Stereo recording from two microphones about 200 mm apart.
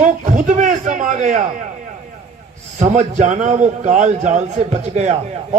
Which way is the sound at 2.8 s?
35° right (ahead or behind).